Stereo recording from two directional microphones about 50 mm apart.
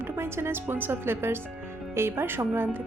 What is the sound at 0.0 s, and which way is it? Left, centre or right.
A woman's voice, right.